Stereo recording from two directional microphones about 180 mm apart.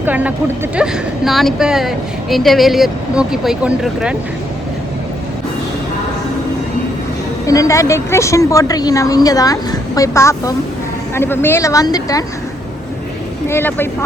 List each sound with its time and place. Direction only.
0.0 s speech: 10° right (ahead or behind)
7.4 s a woman's voice: 20° left (ahead or behind)
13.5 s speech: 10° left (ahead or behind)